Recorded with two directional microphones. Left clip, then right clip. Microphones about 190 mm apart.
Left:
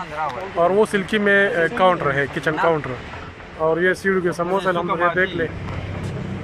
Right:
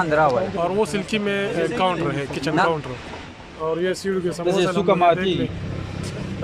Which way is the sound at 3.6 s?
5° right (ahead or behind).